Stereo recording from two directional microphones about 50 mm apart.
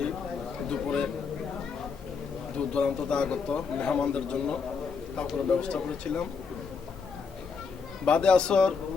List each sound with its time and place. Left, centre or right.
0.7 s a sound: centre
2.6 s a man's voice: left
8.0 s a man's voice: left